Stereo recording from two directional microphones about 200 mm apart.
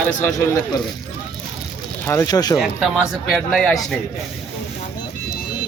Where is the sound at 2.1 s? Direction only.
15° left (ahead or behind).